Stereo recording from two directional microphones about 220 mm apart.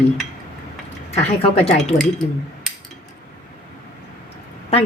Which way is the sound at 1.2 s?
30° left (ahead or behind).